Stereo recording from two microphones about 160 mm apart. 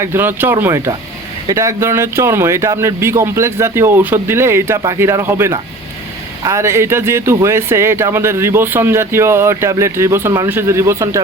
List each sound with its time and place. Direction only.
0.0 s speech: 15° right (ahead or behind)